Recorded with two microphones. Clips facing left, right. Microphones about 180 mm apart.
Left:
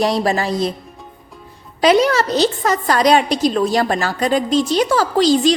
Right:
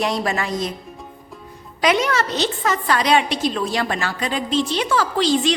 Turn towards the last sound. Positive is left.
turn(degrees=40)  # may be behind; listen again after turning